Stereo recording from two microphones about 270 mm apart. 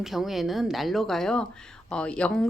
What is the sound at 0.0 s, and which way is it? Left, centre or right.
Speech, centre.